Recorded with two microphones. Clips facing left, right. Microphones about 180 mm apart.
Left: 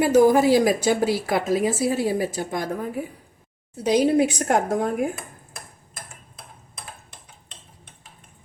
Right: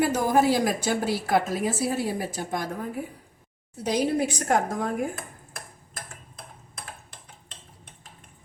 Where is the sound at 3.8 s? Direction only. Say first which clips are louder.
Left 6 dB; 70° left (ahead or behind).